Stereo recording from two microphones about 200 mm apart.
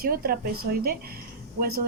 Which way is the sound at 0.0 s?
50° right (ahead or behind).